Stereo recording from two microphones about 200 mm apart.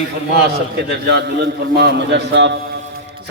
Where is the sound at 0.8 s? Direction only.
55° right (ahead or behind).